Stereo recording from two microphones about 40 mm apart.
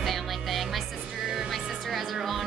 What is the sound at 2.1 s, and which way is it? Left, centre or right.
Speech, centre.